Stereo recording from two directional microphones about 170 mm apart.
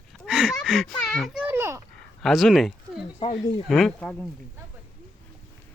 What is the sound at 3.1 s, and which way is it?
Snake, 35° left (ahead or behind).